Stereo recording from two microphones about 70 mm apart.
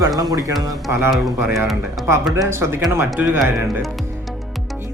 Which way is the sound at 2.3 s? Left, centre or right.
Right.